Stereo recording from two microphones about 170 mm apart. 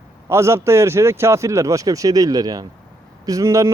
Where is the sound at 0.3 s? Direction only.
15° right (ahead or behind).